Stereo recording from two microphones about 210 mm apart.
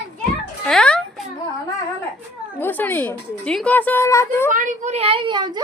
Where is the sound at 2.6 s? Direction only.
10° left (ahead or behind).